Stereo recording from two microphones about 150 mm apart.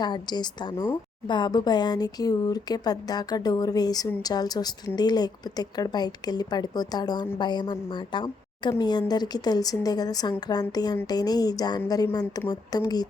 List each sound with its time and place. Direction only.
0.0 s speech: 30° left (ahead or behind)